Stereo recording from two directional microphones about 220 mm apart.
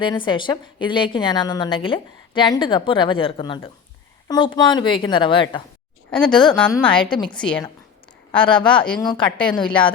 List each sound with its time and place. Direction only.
0.0 s a woman's voice: 20° left (ahead or behind)
6.1 s a woman's voice: 5° left (ahead or behind)
8.3 s a woman's voice: 20° left (ahead or behind)
8.9 s a woman's voice: 5° left (ahead or behind)
9.1 s a woman's voice: 20° left (ahead or behind)